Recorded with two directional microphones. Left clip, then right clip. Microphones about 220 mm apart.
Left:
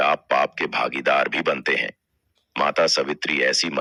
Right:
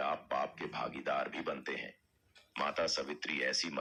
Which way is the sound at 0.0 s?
40° left (ahead or behind).